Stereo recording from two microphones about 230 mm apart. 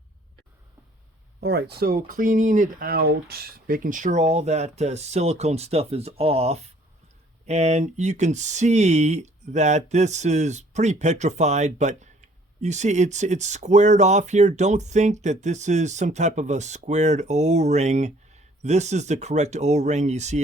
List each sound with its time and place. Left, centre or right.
1.4 s speech: right